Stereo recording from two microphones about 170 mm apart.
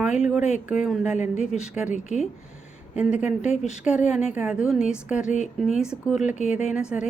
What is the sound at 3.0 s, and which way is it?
A woman's voice, 5° right (ahead or behind).